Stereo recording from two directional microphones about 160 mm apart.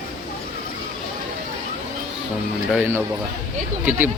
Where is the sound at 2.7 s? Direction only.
10° right (ahead or behind).